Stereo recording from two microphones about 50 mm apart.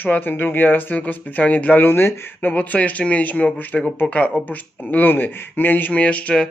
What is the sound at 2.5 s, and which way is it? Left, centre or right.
Speech, left.